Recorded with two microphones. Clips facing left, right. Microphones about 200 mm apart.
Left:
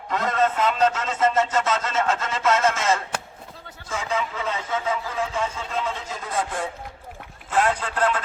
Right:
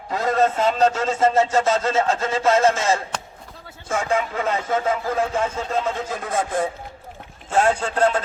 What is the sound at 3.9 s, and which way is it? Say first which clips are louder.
Speech: right 5 dB; 50° right (ahead or behind).